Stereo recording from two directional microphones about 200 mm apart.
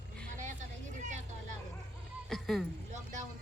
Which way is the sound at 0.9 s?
40° right (ahead or behind).